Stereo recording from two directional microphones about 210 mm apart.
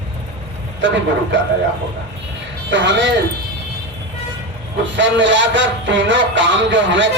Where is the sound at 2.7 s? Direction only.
60° right (ahead or behind).